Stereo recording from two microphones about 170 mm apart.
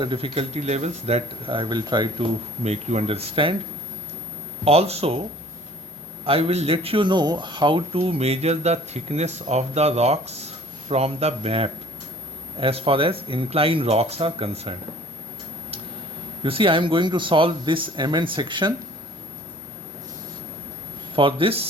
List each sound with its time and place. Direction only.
0.0 s speech: 30° right (ahead or behind)
4.6 s speech: 35° right (ahead or behind)
6.2 s speech: 35° right (ahead or behind)
16.4 s speech: 30° right (ahead or behind)
21.2 s speech: 30° right (ahead or behind)